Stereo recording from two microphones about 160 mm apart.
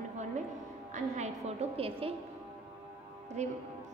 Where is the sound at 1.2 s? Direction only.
45° right (ahead or behind).